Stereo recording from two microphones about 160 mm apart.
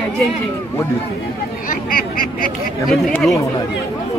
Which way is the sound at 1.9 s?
60° left (ahead or behind).